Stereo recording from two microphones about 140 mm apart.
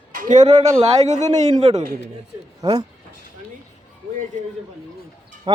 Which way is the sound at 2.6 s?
30° right (ahead or behind).